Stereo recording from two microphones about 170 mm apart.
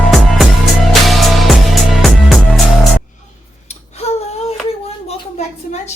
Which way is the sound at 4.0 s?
40° left (ahead or behind).